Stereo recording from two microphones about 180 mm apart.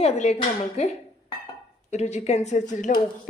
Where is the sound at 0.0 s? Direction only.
40° left (ahead or behind).